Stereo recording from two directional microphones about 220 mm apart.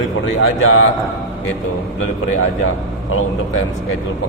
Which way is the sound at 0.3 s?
65° left (ahead or behind).